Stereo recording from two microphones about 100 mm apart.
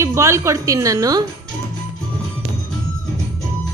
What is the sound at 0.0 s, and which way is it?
A woman's voice, 30° right (ahead or behind).